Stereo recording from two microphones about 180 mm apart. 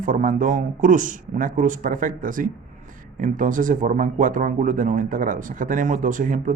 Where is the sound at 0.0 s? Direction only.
45° right (ahead or behind).